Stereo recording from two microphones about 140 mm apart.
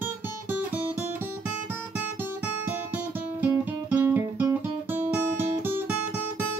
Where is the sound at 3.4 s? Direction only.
15° right (ahead or behind).